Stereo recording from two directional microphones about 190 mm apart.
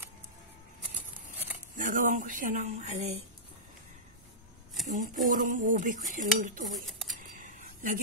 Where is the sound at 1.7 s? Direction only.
45° right (ahead or behind).